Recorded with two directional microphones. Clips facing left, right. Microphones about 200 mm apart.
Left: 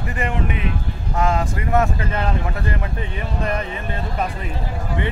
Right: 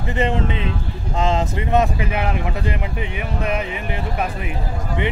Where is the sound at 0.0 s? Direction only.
25° right (ahead or behind).